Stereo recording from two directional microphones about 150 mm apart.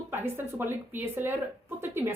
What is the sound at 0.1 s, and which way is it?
Speech, 15° right (ahead or behind).